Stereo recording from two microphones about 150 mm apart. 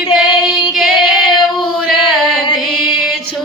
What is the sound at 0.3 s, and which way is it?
Child singing, 30° left (ahead or behind).